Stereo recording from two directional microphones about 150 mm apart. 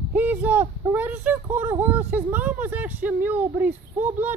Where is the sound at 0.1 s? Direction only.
10° right (ahead or behind).